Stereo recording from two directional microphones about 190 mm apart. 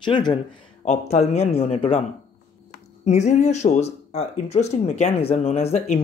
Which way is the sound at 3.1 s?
35° left (ahead or behind).